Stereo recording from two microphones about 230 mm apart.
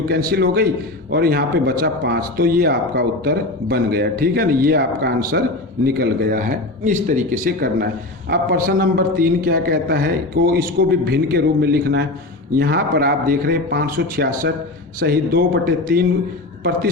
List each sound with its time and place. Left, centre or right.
0.1 s a man's voice: right